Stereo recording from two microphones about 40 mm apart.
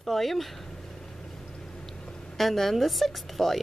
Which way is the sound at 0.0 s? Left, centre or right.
Centre.